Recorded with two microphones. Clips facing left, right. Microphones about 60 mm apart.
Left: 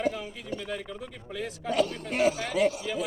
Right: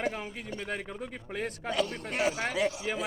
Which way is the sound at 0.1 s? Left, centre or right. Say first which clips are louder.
Left 2 dB; right.